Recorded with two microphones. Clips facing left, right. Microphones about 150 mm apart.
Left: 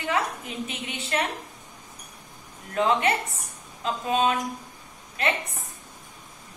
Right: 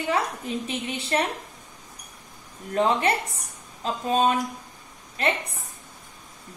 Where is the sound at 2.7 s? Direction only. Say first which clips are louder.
Right 1 dB; 35° right (ahead or behind).